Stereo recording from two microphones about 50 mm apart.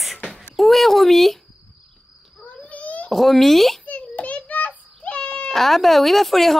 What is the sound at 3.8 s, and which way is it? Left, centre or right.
Child singing, left.